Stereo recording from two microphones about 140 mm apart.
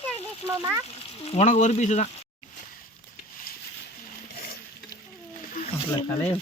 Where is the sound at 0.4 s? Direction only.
20° right (ahead or behind).